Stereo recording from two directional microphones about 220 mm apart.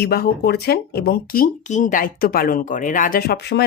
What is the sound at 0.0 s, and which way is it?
Speech, 45° left (ahead or behind).